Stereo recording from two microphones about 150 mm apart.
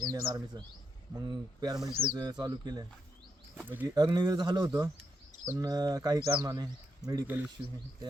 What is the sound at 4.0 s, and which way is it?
Speech, 25° right (ahead or behind).